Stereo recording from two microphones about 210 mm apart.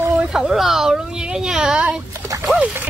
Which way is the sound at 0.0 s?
5° right (ahead or behind).